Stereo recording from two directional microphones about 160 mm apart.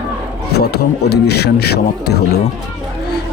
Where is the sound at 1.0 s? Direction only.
90° left.